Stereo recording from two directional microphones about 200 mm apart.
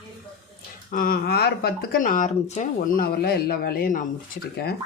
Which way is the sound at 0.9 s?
45° left (ahead or behind).